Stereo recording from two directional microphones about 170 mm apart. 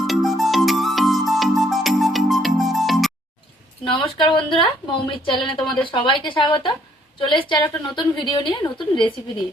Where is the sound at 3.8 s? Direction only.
30° left (ahead or behind).